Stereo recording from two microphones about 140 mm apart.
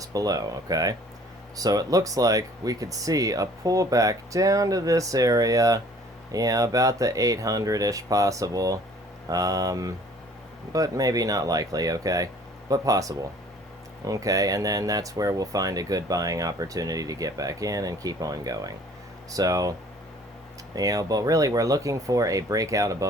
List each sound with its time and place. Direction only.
0.0 s speech: 25° right (ahead or behind)
20.7 s speech: 25° right (ahead or behind)